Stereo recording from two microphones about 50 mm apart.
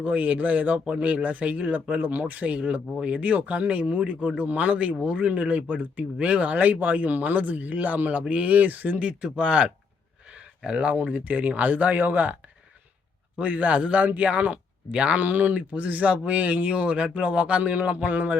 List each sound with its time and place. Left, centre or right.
0.0 s speech: right
10.2 s a sound: centre
10.9 s speech: right
13.4 s speech: right